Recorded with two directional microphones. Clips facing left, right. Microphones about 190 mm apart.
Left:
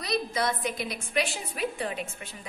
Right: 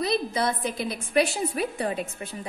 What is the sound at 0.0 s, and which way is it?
A woman's voice, 30° right (ahead or behind).